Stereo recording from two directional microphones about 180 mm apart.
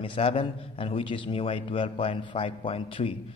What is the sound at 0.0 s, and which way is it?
A man's voice, 30° left (ahead or behind).